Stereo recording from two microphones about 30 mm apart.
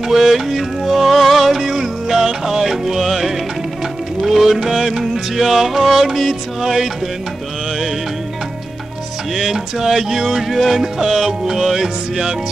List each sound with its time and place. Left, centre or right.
0.1 s music: centre
9.3 s music: centre
10.5 s music: centre
10.8 s music: centre